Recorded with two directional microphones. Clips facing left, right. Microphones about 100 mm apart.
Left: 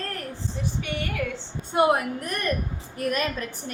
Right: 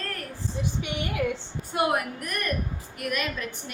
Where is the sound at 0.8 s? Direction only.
15° right (ahead or behind).